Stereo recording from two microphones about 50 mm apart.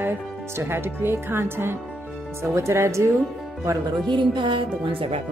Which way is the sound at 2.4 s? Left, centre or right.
Right.